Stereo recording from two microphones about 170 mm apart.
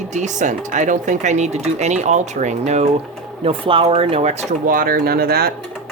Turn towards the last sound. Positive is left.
turn(degrees=-65)  # may be behind; listen again after turning